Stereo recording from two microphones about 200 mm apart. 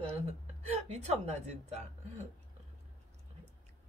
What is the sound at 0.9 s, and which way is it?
Speech, 35° right (ahead or behind).